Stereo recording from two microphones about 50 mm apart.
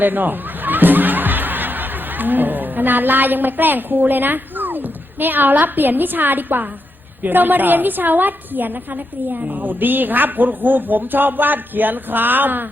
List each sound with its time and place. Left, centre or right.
0.0 s snicker: right
7.2 s speech: right